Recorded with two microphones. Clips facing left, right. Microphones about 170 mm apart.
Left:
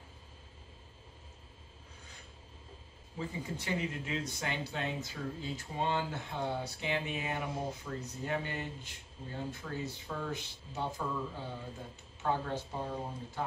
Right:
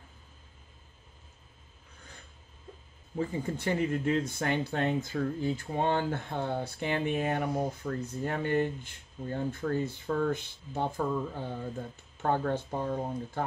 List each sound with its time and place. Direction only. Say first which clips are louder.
3.2 s speech: right 7 dB; 50° right (ahead or behind)